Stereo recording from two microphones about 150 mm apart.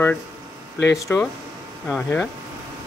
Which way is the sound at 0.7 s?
15° left (ahead or behind).